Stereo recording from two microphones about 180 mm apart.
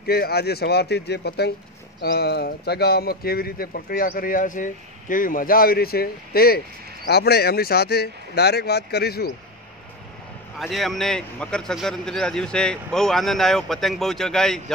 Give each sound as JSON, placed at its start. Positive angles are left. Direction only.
{"t": 0.0, "sound": "speech", "side_deg": 60}
{"t": 10.6, "sound": "speech", "side_deg": 0}